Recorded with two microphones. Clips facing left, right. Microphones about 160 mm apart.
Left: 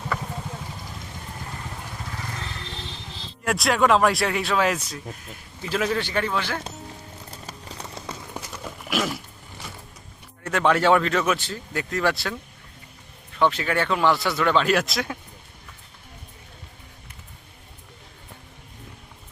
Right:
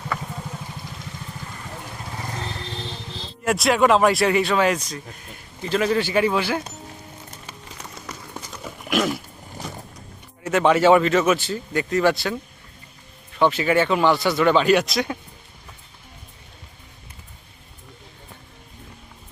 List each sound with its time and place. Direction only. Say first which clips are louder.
3.4 s speech: right 3 dB; centre (ahead or behind)
7.4 s clip-clop: left 4 dB; 30° left (ahead or behind)
8.6 s a sound: right 4 dB; centre (ahead or behind)
10.4 s speech: right 4 dB; 5° right (ahead or behind)